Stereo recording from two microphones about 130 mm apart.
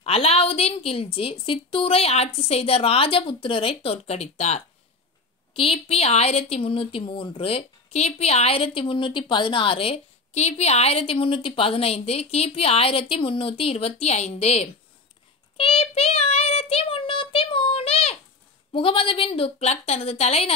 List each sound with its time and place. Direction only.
0.0 s speech: 50° left (ahead or behind)
15.5 s child singing: 45° left (ahead or behind)
18.7 s speech: 45° left (ahead or behind)